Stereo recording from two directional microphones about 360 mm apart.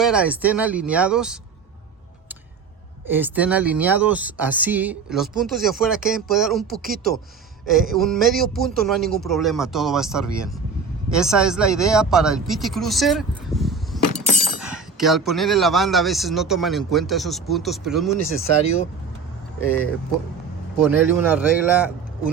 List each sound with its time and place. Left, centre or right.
0.0 s speech: centre
3.1 s speech: centre
14.3 s chink: left
14.6 s speech: centre
20.7 s speech: centre